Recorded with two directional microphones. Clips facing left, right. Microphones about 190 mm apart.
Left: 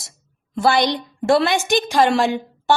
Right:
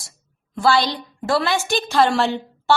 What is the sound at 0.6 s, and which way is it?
A woman's voice, 20° left (ahead or behind).